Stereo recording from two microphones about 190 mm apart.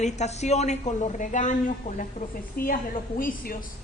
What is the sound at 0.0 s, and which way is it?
A woman's voice, 35° left (ahead or behind).